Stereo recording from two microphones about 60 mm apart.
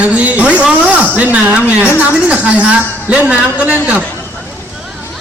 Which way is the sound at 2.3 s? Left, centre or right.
Right.